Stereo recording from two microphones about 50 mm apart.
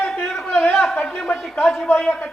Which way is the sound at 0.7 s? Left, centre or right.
Centre.